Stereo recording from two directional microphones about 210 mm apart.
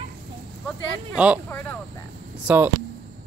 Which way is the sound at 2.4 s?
5° right (ahead or behind).